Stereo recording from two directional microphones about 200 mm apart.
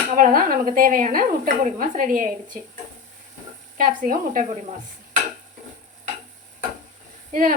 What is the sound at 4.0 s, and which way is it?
Speech, 40° right (ahead or behind).